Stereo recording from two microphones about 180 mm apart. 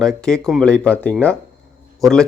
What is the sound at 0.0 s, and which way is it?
A man's voice, 5° left (ahead or behind).